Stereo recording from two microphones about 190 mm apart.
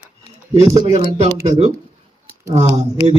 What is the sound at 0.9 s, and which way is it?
Speech, 25° right (ahead or behind).